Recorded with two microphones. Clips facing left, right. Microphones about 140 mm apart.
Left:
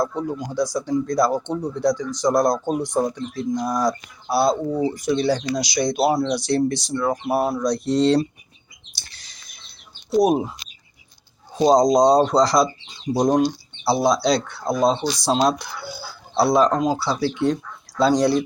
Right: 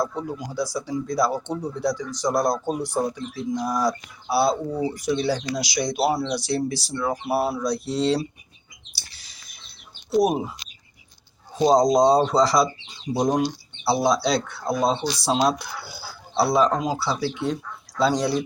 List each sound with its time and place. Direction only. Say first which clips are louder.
0.0 s speech: left 3 dB; 5° right (ahead or behind)
6.1 s speech: left 4 dB; 15° left (ahead or behind)
6.3 s speech: left 4 dB; 5° right (ahead or behind)
9.0 s bird: left 2 dB; 5° right (ahead or behind)
10.1 s speech: left 3 dB; 5° right (ahead or behind)
11.5 s speech: left 2 dB; 5° right (ahead or behind)